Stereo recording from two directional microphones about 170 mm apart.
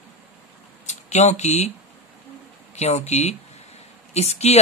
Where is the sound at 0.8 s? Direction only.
40° left (ahead or behind).